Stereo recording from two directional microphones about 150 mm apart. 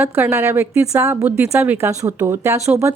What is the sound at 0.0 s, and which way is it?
A woman's voice, 15° right (ahead or behind).